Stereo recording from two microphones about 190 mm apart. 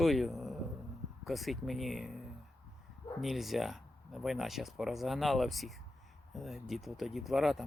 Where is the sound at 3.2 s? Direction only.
Centre (ahead or behind).